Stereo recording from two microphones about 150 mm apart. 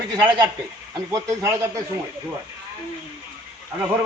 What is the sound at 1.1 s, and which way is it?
Speech, 20° right (ahead or behind).